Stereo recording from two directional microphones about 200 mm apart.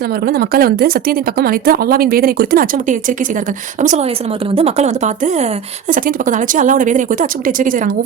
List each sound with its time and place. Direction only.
0.3 s a woman's voice: 50° right (ahead or behind)